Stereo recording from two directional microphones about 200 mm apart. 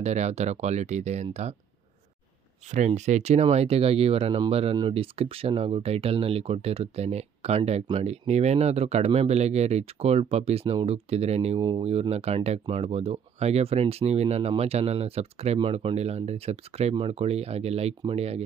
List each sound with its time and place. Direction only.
0.0 s speech: 35° right (ahead or behind)
2.7 s speech: 35° right (ahead or behind)